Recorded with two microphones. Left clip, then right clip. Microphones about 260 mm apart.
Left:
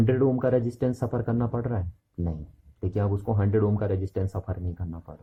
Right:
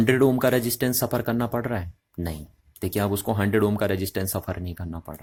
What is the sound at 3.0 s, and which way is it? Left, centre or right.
Speech, right.